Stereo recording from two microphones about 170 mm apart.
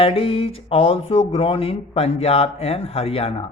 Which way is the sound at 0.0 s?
35° left (ahead or behind).